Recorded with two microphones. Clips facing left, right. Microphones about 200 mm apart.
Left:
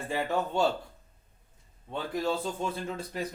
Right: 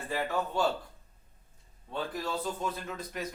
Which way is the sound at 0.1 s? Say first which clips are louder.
Left 2 dB; 25° left (ahead or behind).